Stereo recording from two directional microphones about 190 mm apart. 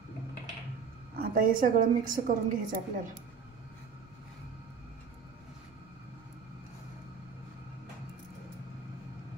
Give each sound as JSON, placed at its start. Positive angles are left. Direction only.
{"t": 1.1, "sound": "a woman's voice", "side_deg": -50}